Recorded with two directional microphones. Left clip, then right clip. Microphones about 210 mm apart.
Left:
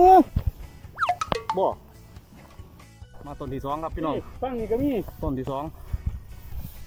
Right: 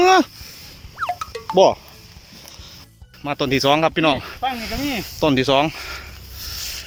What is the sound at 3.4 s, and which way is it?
Speech, 30° right (ahead or behind).